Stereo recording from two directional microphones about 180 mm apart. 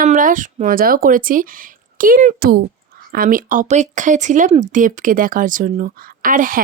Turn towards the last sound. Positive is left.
turn(degrees=-50)  # may be behind; listen again after turning